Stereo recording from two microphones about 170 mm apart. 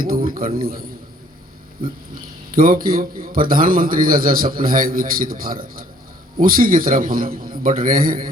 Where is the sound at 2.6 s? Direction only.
55° right (ahead or behind).